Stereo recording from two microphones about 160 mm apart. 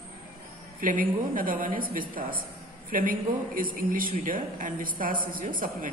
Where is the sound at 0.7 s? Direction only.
60° right (ahead or behind).